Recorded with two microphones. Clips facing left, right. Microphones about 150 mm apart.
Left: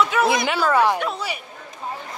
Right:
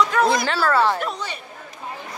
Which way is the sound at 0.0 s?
5° left (ahead or behind).